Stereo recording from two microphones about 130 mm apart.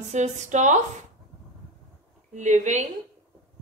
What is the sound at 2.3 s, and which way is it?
Speech, 65° right (ahead or behind).